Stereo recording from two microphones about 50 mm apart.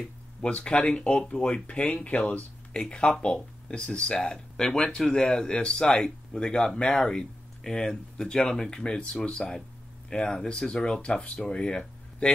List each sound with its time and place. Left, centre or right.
0.4 s speech: left